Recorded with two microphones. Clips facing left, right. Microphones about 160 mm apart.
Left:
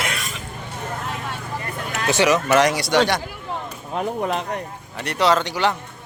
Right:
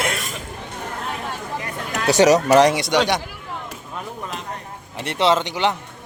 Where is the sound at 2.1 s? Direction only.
40° right (ahead or behind).